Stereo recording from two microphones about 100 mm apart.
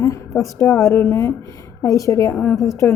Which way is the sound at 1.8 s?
35° left (ahead or behind).